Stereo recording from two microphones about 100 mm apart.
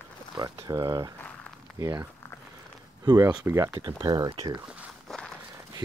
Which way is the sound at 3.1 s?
45° right (ahead or behind).